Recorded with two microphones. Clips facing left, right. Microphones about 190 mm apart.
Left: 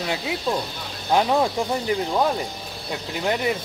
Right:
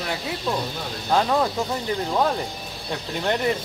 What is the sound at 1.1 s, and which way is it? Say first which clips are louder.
Speech: left 1 dB; 15° left (ahead or behind).